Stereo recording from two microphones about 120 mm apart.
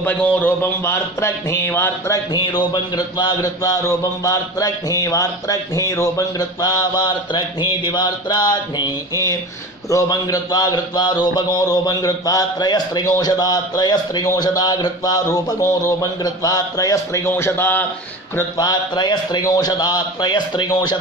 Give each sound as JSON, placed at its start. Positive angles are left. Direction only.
{"t": 0.0, "sound": "speech", "side_deg": 15}
{"t": 2.3, "sound": "speech", "side_deg": 35}
{"t": 18.6, "sound": "speech", "side_deg": 35}